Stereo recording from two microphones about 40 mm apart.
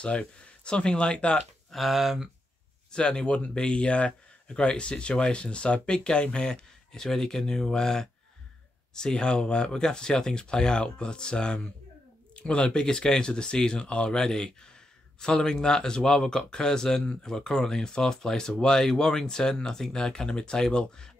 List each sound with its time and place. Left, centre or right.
0.0 s speech: left
1.7 s speech: centre
2.9 s speech: left
7.0 s speech: centre